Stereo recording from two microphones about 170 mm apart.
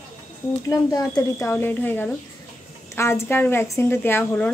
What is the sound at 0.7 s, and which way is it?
A woman's voice, 20° left (ahead or behind).